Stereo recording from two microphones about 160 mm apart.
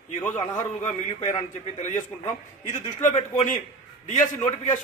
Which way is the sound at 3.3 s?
40° left (ahead or behind).